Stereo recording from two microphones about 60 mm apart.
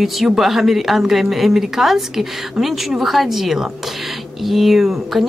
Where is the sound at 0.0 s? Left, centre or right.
Centre.